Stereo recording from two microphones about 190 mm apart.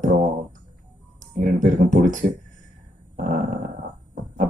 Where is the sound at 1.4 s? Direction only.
45° right (ahead or behind).